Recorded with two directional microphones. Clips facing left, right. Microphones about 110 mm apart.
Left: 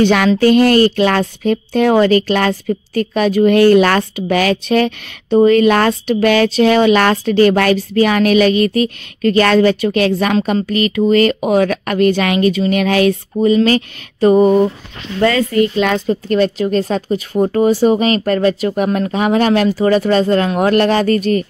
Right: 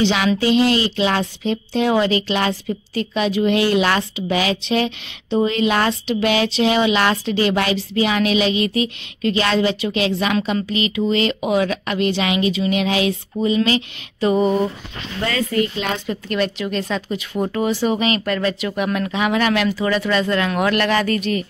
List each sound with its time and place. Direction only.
0.0 s speech: 50° left (ahead or behind)
16.1 s speech: 35° left (ahead or behind)